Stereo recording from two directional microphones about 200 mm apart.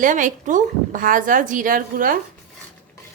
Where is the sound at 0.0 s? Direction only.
40° right (ahead or behind).